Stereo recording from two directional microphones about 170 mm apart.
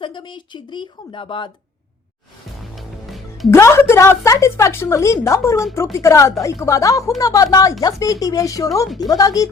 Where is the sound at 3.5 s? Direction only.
15° left (ahead or behind).